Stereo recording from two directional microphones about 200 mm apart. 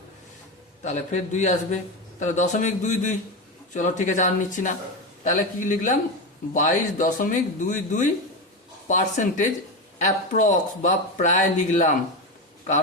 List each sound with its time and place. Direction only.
0.9 s a man's voice: 35° left (ahead or behind)